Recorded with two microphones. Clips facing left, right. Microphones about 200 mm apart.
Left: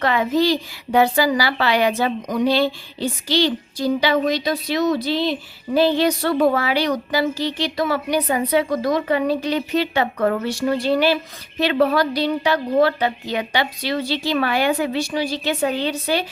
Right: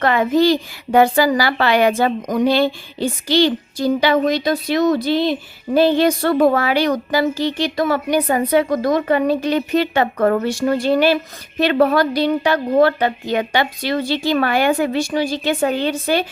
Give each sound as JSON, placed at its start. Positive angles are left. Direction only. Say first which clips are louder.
{"t": 0.0, "sound": "speech", "louder": "right 3 dB", "side_deg": -50}